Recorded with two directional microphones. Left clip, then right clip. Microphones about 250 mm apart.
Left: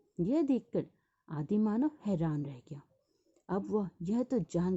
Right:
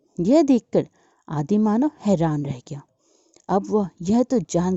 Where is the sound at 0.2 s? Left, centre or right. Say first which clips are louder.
Right 14 dB; right.